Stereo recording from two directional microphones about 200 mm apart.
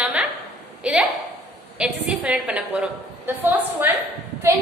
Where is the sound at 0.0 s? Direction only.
5° right (ahead or behind).